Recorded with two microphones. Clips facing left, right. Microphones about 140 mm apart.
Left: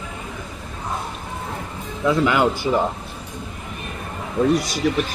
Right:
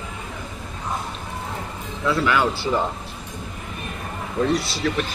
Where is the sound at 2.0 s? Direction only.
20° left (ahead or behind).